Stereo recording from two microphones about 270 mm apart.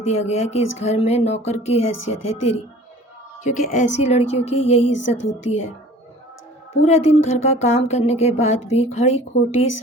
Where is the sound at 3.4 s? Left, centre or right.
Left.